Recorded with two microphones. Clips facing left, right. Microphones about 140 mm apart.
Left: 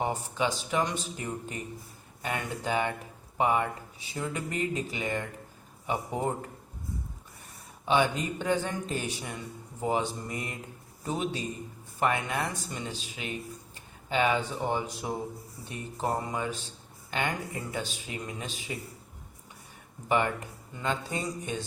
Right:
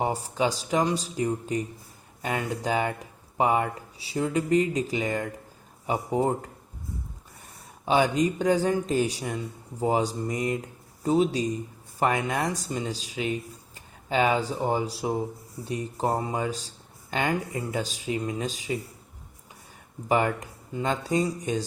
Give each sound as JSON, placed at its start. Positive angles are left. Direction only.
{"t": 0.0, "sound": "speech", "side_deg": -35}
{"t": 7.9, "sound": "speech", "side_deg": -40}
{"t": 14.1, "sound": "speech", "side_deg": -35}
{"t": 20.1, "sound": "speech", "side_deg": -40}